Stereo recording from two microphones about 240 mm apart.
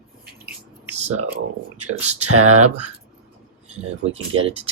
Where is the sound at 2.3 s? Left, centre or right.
Right.